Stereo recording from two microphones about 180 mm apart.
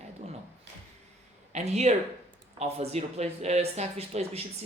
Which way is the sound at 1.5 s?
40° right (ahead or behind).